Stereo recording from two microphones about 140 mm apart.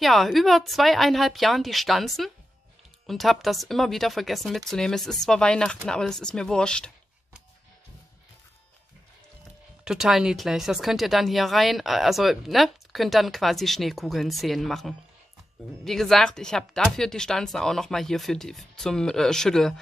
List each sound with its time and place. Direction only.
0.0 s speech: centre (ahead or behind)
9.8 s speech: 5° right (ahead or behind)